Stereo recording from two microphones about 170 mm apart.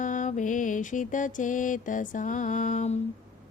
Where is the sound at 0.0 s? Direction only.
50° left (ahead or behind).